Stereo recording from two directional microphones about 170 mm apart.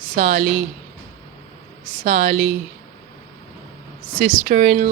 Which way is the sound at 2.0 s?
50° right (ahead or behind).